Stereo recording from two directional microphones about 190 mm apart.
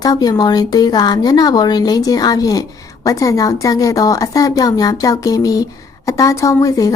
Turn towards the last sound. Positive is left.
turn(degrees=15)  # may be behind; listen again after turning